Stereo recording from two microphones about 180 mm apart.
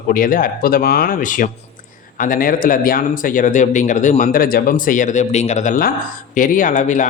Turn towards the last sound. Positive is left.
turn(degrees=45)  # may be behind; listen again after turning